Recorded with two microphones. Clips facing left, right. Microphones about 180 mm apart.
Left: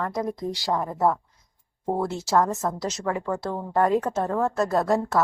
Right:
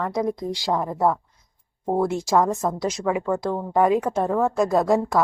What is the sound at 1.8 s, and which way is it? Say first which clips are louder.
A woman's voice: right 4 dB; 10° right (ahead or behind).